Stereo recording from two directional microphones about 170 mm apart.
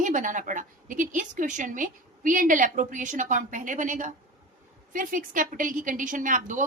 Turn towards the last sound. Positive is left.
turn(degrees=-50)  # may be behind; listen again after turning